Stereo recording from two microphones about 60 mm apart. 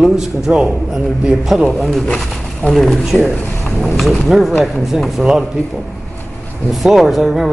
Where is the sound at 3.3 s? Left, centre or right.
Left.